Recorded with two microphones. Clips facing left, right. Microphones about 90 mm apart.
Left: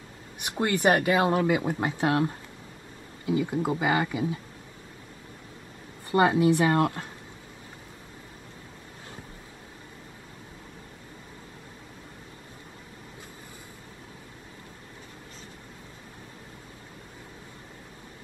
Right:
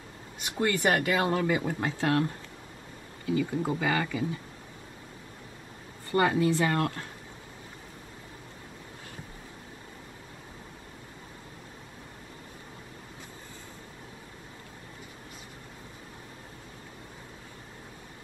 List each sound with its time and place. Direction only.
0.5 s speech: 25° left (ahead or behind)
6.1 s speech: 20° left (ahead or behind)